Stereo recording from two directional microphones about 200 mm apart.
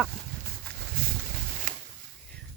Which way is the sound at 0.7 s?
45° right (ahead or behind).